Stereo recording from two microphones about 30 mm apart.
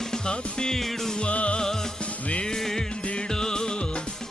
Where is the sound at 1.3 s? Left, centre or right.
Left.